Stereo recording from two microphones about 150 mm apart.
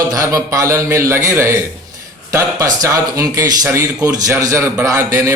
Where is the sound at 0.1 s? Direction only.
20° right (ahead or behind).